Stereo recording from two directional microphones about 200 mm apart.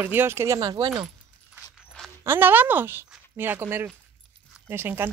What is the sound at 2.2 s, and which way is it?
Speech, 10° right (ahead or behind).